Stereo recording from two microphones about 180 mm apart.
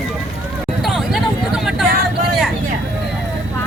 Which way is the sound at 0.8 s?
Centre (ahead or behind).